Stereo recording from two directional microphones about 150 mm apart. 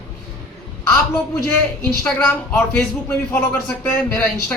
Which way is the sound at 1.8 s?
5° left (ahead or behind).